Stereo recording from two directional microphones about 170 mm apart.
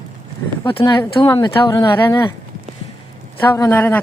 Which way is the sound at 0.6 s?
30° left (ahead or behind).